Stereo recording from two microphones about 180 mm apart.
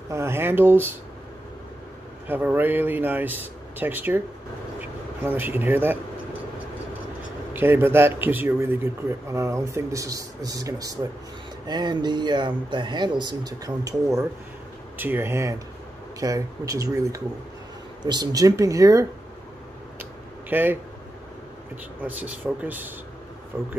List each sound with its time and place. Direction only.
0.1 s speech: 15° right (ahead or behind)
2.2 s speech: 10° right (ahead or behind)
7.5 s speech: 10° right (ahead or behind)
20.0 s a sound: 10° right (ahead or behind)
22.0 s speech: 10° right (ahead or behind)